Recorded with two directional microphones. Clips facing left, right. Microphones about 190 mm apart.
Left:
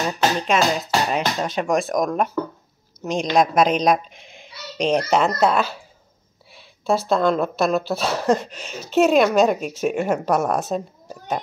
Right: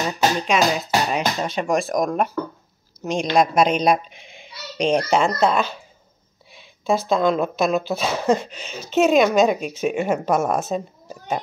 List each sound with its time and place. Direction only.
0.0 s speech: centre (ahead or behind)
7.1 s speech: centre (ahead or behind)